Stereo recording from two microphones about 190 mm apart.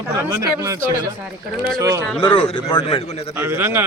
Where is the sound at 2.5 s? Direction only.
25° left (ahead or behind).